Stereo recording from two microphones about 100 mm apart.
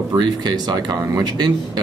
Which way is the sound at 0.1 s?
45° right (ahead or behind).